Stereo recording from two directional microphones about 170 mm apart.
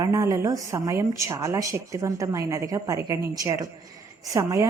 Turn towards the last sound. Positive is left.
turn(degrees=-20)  # may be behind; listen again after turning